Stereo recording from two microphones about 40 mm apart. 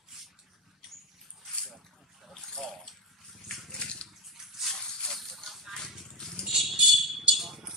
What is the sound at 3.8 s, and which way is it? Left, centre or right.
Bathtub, left.